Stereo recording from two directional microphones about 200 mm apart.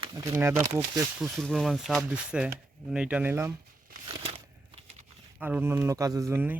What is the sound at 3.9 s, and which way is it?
Crumpling, 35° right (ahead or behind).